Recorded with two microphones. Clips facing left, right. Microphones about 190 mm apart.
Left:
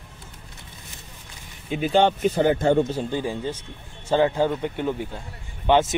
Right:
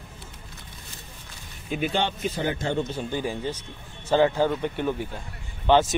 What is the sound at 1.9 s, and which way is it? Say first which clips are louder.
Speech: left 8 dB; 45° left (ahead or behind).